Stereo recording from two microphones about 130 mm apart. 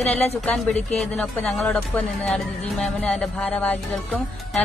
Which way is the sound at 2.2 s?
Centre (ahead or behind).